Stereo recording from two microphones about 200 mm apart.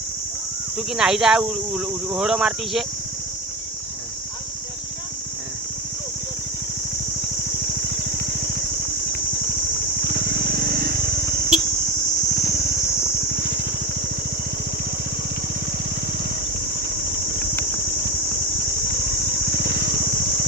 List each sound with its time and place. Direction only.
0.8 s speech: 5° right (ahead or behind)
10.0 s vehicle: 50° right (ahead or behind)
18.9 s vehicle: 50° right (ahead or behind)